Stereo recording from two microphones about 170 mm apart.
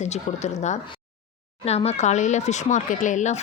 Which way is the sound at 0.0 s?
40° left (ahead or behind).